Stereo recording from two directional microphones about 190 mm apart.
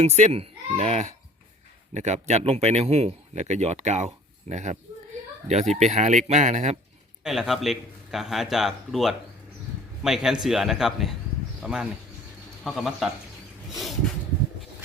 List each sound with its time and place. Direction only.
0.0 s speech: 35° right (ahead or behind)
7.3 s speech: centre (ahead or behind)